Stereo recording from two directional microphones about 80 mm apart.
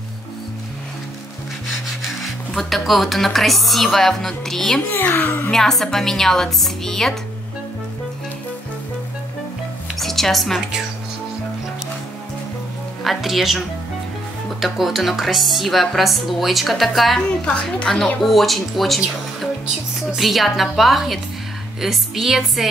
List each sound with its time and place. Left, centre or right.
2.2 s speech: centre
4.8 s speech: left
5.5 s speech: centre
9.9 s music: centre
13.0 s speech: centre
14.6 s speech: centre